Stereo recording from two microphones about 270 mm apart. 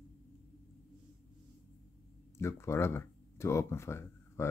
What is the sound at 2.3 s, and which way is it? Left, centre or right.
Speech, centre.